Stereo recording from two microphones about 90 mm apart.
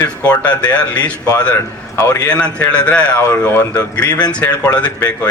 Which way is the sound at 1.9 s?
30° left (ahead or behind).